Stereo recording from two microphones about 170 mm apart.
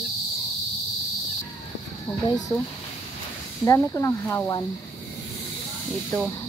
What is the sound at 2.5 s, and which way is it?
Speech, 20° left (ahead or behind).